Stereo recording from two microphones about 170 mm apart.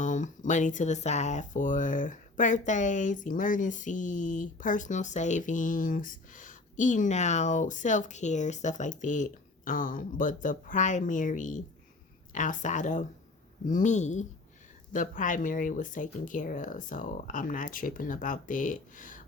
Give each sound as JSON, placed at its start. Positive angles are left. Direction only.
{"t": 0.0, "sound": "speech", "side_deg": 45}